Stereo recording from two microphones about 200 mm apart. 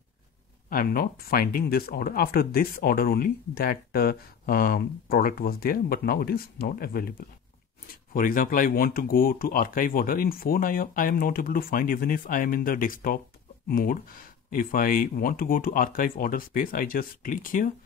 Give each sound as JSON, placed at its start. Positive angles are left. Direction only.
{"t": 0.7, "sound": "speech", "side_deg": 45}